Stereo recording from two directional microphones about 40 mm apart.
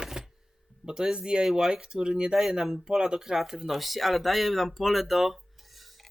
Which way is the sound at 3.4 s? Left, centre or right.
Centre.